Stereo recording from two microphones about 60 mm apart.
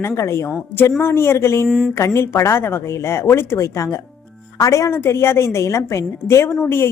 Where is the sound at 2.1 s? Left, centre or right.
Left.